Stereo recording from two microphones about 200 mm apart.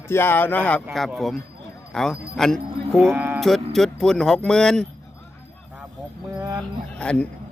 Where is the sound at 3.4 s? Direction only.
Centre (ahead or behind).